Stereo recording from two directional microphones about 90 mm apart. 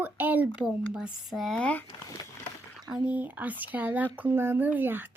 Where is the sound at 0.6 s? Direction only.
5° right (ahead or behind).